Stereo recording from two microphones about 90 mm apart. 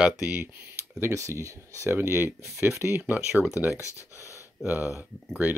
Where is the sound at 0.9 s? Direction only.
35° right (ahead or behind).